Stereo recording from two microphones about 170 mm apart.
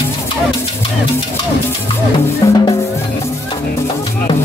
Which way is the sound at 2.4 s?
20° left (ahead or behind).